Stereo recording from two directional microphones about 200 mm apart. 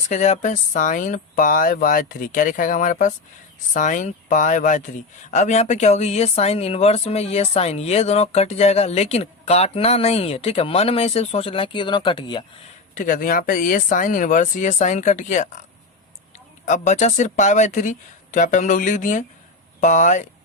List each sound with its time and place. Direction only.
0.1 s speech: 35° left (ahead or behind)
12.9 s speech: 40° left (ahead or behind)
16.6 s speech: 35° left (ahead or behind)